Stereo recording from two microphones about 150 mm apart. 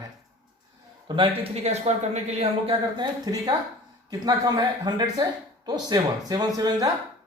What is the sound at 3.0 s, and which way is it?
Speech, 25° right (ahead or behind).